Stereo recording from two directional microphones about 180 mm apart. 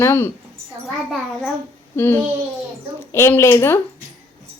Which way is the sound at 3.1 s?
15° left (ahead or behind).